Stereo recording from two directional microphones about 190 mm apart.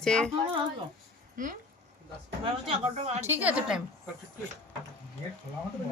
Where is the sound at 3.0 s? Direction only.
35° right (ahead or behind).